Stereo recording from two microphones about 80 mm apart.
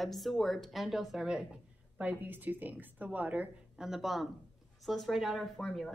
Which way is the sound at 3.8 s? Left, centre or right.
Centre.